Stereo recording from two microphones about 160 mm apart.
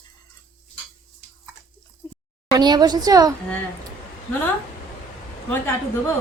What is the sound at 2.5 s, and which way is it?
Speech, 25° right (ahead or behind).